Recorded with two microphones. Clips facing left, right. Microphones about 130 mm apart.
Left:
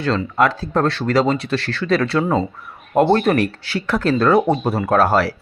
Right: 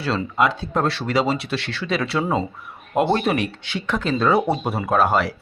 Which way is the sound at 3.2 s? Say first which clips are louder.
Left 5 dB; centre (ahead or behind).